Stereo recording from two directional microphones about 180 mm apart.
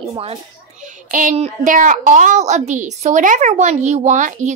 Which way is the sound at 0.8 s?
45° right (ahead or behind).